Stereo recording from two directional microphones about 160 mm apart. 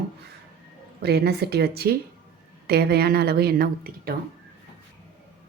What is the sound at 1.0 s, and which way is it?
A woman's voice, 90° right.